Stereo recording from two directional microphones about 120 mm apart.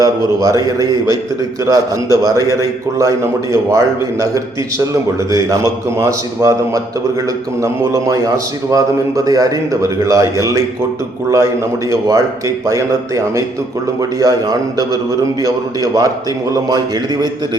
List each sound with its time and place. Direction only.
0.3 s a man's voice: 30° right (ahead or behind)
5.3 s a man's voice: 25° right (ahead or behind)